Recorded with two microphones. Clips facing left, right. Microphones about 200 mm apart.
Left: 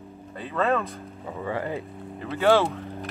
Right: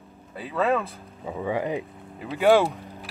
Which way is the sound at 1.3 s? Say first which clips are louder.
Right 3 dB; 15° right (ahead or behind).